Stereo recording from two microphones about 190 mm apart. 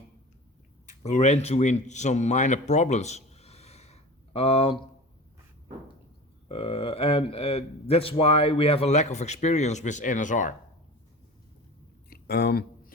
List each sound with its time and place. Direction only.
0.9 s speech: 40° left (ahead or behind)
6.5 s a man's voice: 30° left (ahead or behind)
12.1 s speech: 60° left (ahead or behind)